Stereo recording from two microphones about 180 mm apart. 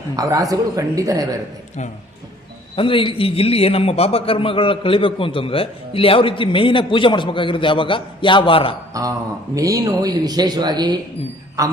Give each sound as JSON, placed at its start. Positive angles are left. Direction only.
{"t": 0.2, "sound": "speech", "side_deg": -20}
{"t": 2.7, "sound": "a man's voice", "side_deg": 30}
{"t": 8.9, "sound": "speech", "side_deg": -20}